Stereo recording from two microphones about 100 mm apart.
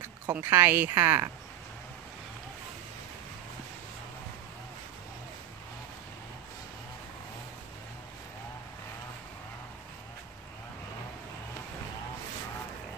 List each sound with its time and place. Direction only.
0.0 s speech: 20° right (ahead or behind)